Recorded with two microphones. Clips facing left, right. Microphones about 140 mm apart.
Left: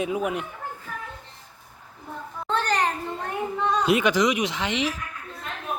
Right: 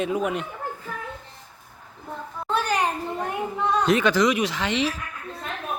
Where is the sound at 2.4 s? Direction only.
10° right (ahead or behind).